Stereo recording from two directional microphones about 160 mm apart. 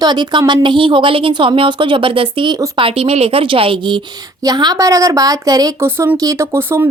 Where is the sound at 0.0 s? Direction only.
25° right (ahead or behind).